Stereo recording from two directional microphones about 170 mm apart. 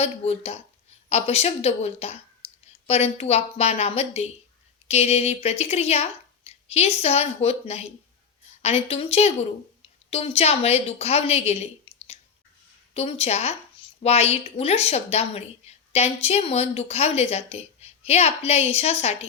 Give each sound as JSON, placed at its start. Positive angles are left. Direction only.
{"t": 0.0, "sound": "a woman's voice", "side_deg": 35}